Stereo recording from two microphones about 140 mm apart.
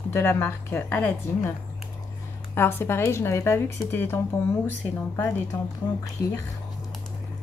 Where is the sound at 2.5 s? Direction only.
15° left (ahead or behind).